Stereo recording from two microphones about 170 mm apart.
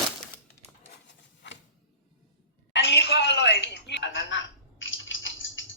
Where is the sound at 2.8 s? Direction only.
85° left.